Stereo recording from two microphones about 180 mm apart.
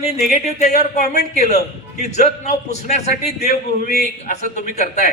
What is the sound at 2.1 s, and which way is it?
Speech, 40° left (ahead or behind).